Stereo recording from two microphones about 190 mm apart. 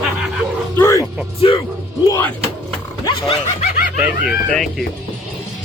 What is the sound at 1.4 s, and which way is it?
Speech, 30° left (ahead or behind).